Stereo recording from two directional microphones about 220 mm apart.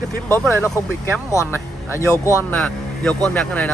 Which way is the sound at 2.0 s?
15° left (ahead or behind).